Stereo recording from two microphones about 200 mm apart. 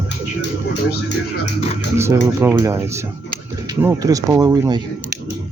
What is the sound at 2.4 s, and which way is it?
Speech, 10° right (ahead or behind).